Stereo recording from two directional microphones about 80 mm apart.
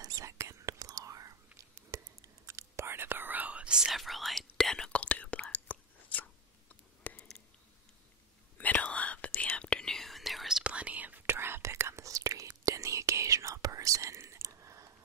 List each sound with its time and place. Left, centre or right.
0.0 s whispering: right; by 4.9 s centre
4.9 s whispering: centre
8.5 s whispering: centre
10.6 s whispering: centre; by 14.9 s right